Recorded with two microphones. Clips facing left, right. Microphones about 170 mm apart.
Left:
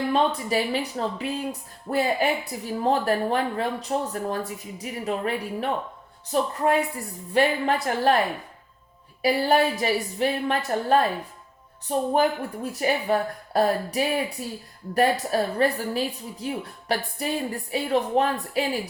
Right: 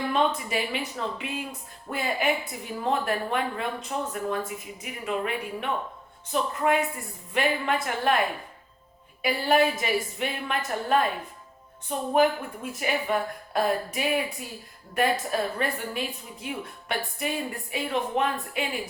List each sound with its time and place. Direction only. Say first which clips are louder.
0.1 s a woman's voice: left 2 dB; 35° left (ahead or behind)
9.2 s a woman's voice: left 2 dB; 35° left (ahead or behind)